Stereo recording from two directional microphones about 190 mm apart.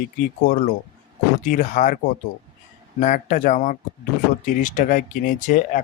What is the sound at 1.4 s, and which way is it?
Speech, 45° left (ahead or behind).